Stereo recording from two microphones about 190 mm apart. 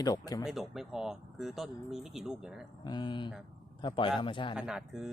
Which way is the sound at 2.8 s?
25° left (ahead or behind).